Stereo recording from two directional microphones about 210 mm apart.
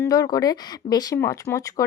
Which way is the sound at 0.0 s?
20° left (ahead or behind).